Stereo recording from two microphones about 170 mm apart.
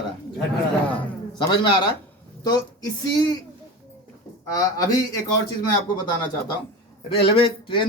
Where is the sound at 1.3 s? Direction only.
25° left (ahead or behind).